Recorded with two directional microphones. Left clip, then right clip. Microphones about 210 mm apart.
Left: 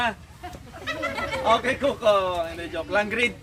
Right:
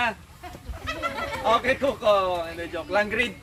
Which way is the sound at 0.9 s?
40° left (ahead or behind).